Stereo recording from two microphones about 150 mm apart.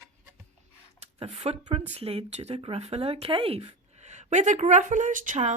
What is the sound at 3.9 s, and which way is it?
A woman's voice, 50° right (ahead or behind).